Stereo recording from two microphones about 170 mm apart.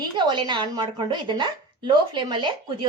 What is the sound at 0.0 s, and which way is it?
A woman's voice, 25° right (ahead or behind).